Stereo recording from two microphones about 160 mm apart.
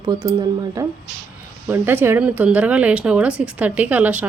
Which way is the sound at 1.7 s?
15° right (ahead or behind).